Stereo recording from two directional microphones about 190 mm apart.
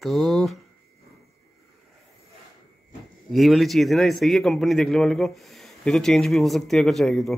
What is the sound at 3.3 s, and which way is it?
A man's voice, centre (ahead or behind).